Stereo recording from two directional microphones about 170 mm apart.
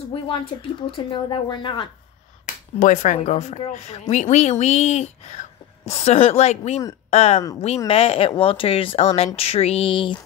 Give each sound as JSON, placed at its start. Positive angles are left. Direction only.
{"t": 0.1, "sound": "speech", "side_deg": 30}
{"t": 2.4, "sound": "speech", "side_deg": 45}